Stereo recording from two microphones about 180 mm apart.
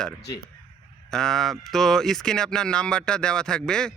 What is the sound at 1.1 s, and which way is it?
Speech, centre (ahead or behind).